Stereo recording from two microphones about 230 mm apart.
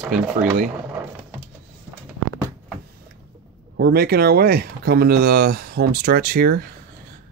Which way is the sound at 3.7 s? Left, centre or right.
Right.